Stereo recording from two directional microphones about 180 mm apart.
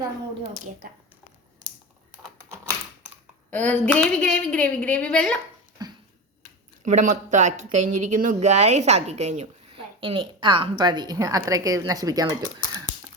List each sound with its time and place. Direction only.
3.5 s a woman's voice: 10° left (ahead or behind)
5.8 s tick-tock: 20° right (ahead or behind)
6.8 s speech: 45° right (ahead or behind); by 12.3 s 20° right (ahead or behind)